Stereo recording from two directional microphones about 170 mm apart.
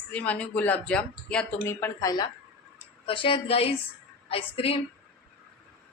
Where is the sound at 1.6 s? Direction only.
20° left (ahead or behind).